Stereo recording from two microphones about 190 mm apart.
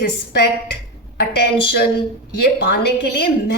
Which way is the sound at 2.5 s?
60° left (ahead or behind).